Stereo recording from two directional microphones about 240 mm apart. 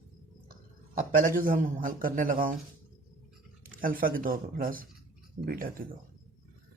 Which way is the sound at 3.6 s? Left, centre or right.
Right.